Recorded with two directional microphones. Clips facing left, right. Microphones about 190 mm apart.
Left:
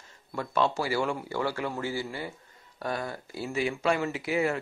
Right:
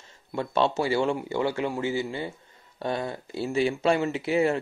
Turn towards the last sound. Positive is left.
turn(degrees=-25)  # may be behind; listen again after turning